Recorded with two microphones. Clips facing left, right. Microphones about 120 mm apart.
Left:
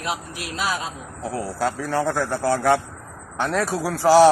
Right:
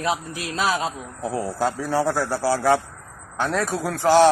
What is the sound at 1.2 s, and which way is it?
A man's voice, 15° right (ahead or behind).